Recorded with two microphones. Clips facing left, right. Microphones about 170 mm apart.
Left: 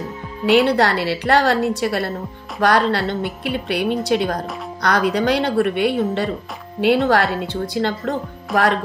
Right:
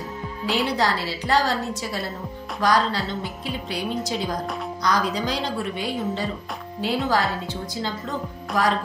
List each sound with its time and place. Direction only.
0.5 s a woman's voice: 65° left (ahead or behind)